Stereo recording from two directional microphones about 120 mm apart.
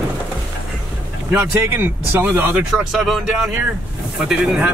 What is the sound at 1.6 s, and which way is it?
Speech, 20° right (ahead or behind).